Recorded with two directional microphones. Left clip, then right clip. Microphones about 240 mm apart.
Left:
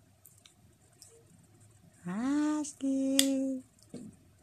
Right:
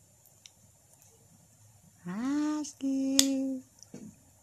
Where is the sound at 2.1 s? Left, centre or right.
Centre.